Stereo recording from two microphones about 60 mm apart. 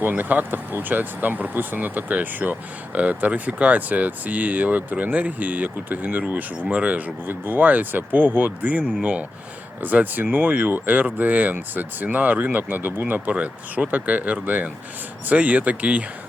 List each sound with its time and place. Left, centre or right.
0.0 s speech: right
7.3 s speech: right